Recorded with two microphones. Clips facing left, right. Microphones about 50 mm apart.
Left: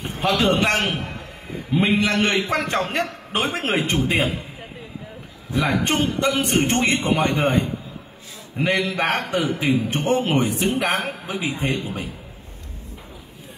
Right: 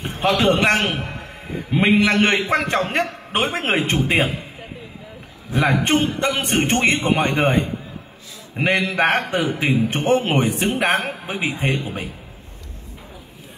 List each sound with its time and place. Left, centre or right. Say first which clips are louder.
0.0 s a man's voice: right 2 dB; right
5.5 s a man's voice: right 3 dB; right